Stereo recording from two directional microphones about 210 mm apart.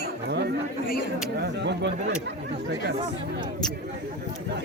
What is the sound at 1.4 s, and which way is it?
Speech, 55° right (ahead or behind).